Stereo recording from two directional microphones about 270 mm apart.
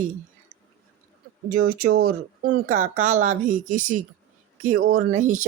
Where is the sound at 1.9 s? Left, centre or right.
Right.